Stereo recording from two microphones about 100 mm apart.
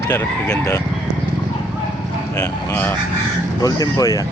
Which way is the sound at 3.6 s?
40° left (ahead or behind).